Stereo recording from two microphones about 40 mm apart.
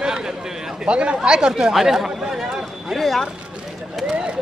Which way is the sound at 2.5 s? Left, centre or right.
Centre.